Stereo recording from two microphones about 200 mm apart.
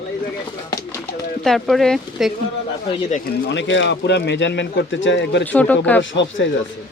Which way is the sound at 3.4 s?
65° left (ahead or behind).